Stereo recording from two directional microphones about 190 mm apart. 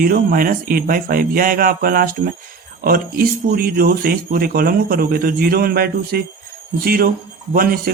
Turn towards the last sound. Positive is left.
turn(degrees=-50)  # may be behind; listen again after turning